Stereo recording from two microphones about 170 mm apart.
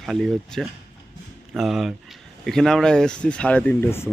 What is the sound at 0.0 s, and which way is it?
Speech, centre (ahead or behind).